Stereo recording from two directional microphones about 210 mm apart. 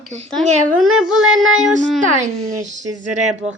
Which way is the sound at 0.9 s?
85° right.